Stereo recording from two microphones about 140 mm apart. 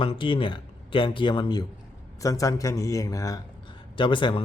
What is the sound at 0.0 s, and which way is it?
Speech, 40° left (ahead or behind).